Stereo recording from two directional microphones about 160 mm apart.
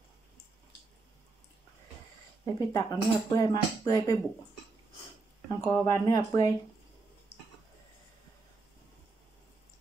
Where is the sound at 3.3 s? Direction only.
25° left (ahead or behind).